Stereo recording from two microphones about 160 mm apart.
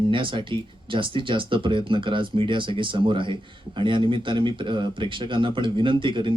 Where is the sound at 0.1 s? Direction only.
30° right (ahead or behind).